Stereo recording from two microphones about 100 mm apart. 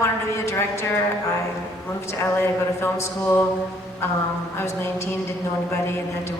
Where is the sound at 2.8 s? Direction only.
25° left (ahead or behind).